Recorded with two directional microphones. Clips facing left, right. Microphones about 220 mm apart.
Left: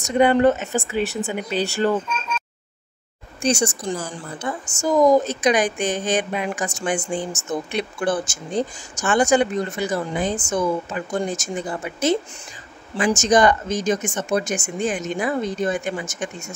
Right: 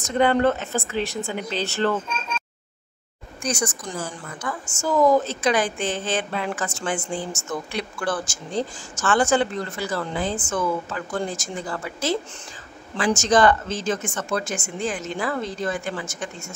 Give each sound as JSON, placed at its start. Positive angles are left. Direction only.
{"t": 0.0, "sound": "a woman's voice", "side_deg": 15}
{"t": 3.4, "sound": "a woman's voice", "side_deg": 30}
{"t": 13.2, "sound": "speech", "side_deg": 15}